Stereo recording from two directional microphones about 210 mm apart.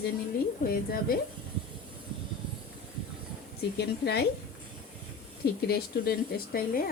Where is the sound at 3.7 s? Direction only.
50° left (ahead or behind).